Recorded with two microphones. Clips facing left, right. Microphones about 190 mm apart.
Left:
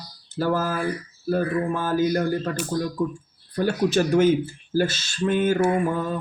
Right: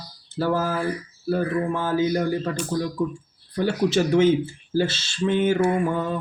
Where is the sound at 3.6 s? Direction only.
25° right (ahead or behind).